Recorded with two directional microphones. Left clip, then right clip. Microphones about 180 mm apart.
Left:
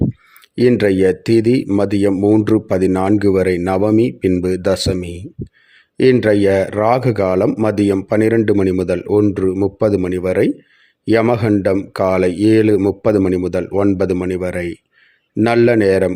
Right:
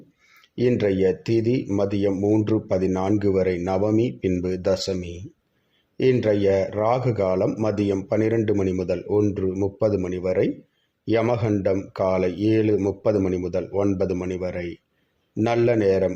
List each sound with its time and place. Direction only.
0.5 s speech: 35° left (ahead or behind)